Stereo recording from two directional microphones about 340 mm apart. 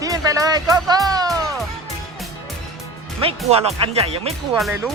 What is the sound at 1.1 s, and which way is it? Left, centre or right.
Music, centre.